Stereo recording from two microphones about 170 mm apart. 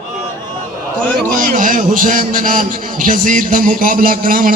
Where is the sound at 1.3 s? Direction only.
55° right (ahead or behind).